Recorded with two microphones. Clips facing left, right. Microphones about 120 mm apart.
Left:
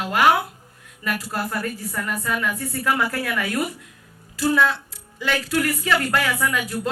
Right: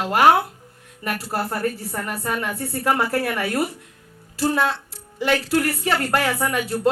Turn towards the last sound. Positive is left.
turn(degrees=-35)  # may be behind; listen again after turning